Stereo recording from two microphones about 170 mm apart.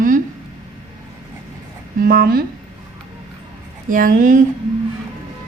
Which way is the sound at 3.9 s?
50° right (ahead or behind).